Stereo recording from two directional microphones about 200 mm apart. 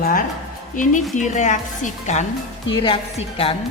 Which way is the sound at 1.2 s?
35° left (ahead or behind).